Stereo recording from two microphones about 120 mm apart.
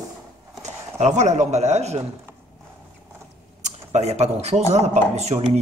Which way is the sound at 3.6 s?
70° right (ahead or behind).